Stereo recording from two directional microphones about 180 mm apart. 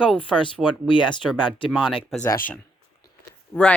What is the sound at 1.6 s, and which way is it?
Speech, 5° right (ahead or behind).